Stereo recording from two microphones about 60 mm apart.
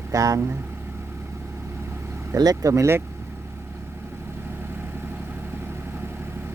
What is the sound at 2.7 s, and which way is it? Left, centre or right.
Speech, right.